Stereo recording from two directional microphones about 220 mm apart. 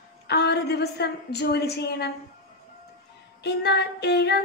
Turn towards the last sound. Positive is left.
turn(degrees=50)  # may be behind; listen again after turning